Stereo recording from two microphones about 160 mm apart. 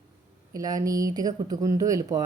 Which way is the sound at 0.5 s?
20° right (ahead or behind).